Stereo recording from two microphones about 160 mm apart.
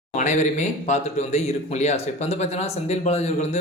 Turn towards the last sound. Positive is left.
turn(degrees=45)  # may be behind; listen again after turning